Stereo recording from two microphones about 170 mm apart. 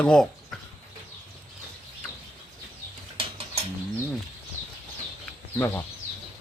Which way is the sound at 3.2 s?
35° right (ahead or behind).